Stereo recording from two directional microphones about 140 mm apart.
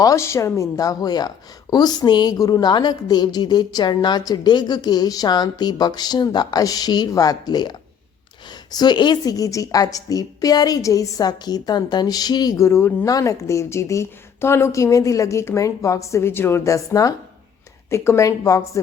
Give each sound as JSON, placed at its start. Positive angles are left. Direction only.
{"t": 0.0, "sound": "a woman's voice", "side_deg": 20}